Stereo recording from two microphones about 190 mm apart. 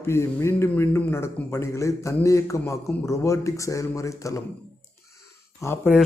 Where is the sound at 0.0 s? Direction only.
15° left (ahead or behind).